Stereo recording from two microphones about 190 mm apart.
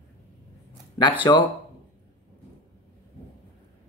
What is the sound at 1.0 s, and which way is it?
Speech, 20° left (ahead or behind).